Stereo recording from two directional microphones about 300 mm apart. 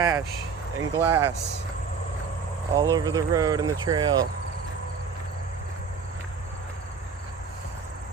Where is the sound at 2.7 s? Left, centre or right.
Centre.